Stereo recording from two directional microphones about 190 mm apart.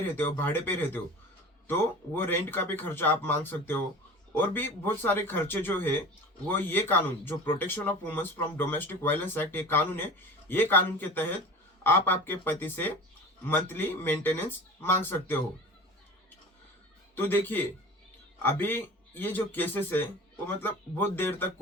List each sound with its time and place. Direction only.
0.0 s a man's voice: 10° left (ahead or behind)
2.1 s a man's voice: 10° left (ahead or behind)
17.2 s a man's voice: 10° left (ahead or behind)